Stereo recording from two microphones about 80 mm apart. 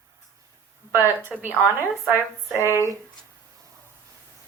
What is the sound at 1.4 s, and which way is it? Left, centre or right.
Speech, right.